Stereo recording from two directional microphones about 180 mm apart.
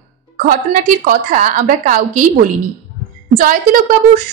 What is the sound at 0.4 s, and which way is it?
A woman's voice, 50° right (ahead or behind).